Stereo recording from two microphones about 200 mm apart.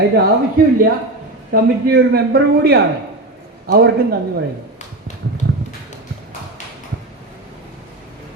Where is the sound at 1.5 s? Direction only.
50° right (ahead or behind).